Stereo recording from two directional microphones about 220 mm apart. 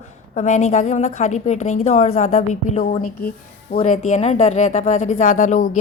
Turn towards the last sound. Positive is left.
turn(degrees=35)  # may be behind; listen again after turning